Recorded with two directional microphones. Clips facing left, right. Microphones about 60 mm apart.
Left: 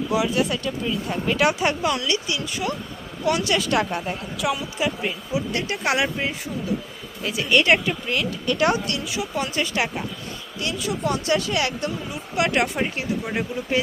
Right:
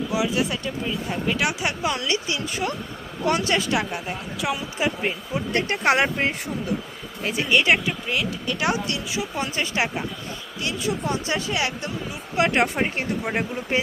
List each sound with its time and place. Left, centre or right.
0.1 s speech: centre
1.3 s speech: centre
1.8 s speech: right
3.7 s speech: centre
4.4 s speech: right
5.3 s speech: right
7.5 s speech: centre; by 12.9 s right